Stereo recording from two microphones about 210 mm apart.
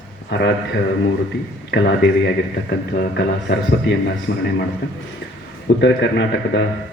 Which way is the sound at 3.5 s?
55° left (ahead or behind).